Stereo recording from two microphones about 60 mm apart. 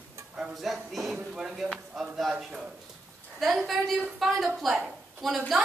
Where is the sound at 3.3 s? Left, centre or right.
Centre.